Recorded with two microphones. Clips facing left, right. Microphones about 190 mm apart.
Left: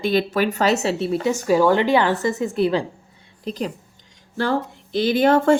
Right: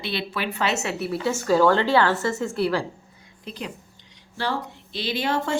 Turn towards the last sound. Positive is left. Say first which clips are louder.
# left 10 dB
turn(degrees=50)  # may be behind; listen again after turning